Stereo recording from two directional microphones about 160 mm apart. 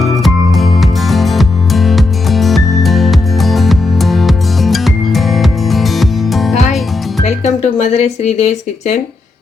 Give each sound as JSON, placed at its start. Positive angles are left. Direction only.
{"t": 0.0, "sound": "music", "side_deg": 0}
{"t": 7.3, "sound": "speech", "side_deg": 45}